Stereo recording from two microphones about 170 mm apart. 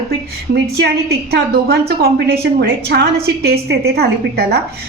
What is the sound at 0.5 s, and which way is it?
A woman's voice, 70° right (ahead or behind).